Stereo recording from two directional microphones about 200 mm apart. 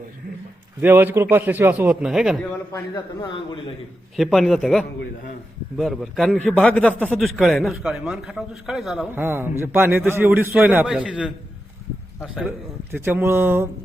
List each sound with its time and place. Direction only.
0.8 s a man's voice: 10° right (ahead or behind)
2.4 s a man's voice: 10° left (ahead or behind)
2.9 s a man's voice: 20° left (ahead or behind)
4.2 s a man's voice: centre (ahead or behind)